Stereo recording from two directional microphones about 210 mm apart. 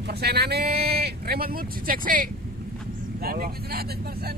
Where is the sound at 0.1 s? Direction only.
50° right (ahead or behind).